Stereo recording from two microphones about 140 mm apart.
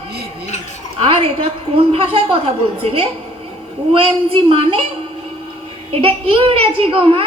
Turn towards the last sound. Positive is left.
turn(degrees=-40)  # may be behind; listen again after turning